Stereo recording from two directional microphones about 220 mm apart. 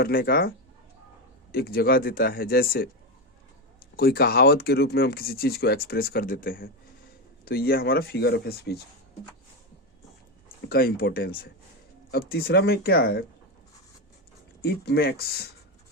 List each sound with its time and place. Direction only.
0.0 s speech: 45° left (ahead or behind)
1.5 s speech: 45° left (ahead or behind)
3.9 s speech: 45° left (ahead or behind)
10.7 s speech: 45° left (ahead or behind)
14.6 s speech: 45° left (ahead or behind)